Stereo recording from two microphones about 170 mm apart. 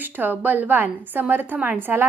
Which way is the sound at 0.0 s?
10° right (ahead or behind).